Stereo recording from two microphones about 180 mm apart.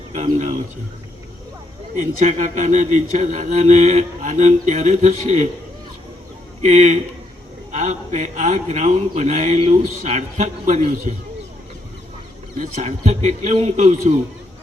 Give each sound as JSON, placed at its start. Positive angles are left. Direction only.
{"t": 0.1, "sound": "a man's voice", "side_deg": -40}
{"t": 2.0, "sound": "speech", "side_deg": -45}
{"t": 6.6, "sound": "a man's voice", "side_deg": -40}
{"t": 12.5, "sound": "a man's voice", "side_deg": -45}